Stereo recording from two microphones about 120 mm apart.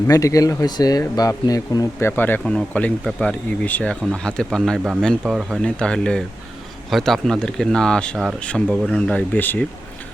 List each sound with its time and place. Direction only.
0.1 s speech: 30° left (ahead or behind)
2.4 s speech: 5° left (ahead or behind)
9.0 s speech: 10° left (ahead or behind)